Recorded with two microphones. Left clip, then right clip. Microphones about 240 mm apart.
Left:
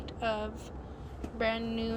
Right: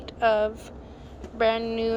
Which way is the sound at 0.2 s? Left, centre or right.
Centre.